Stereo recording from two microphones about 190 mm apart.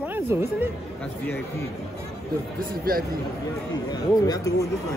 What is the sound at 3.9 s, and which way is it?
Speech, 20° left (ahead or behind).